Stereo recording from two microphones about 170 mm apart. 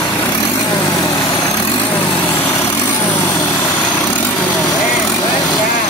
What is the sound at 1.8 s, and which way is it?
Vehicle, 10° left (ahead or behind).